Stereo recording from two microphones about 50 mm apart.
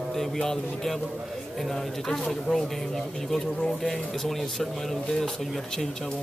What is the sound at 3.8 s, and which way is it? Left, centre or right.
Speech, centre.